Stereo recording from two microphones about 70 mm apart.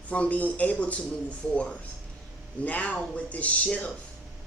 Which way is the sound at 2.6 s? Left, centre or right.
Centre.